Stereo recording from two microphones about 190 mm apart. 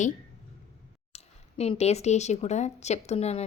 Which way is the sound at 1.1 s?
30° left (ahead or behind).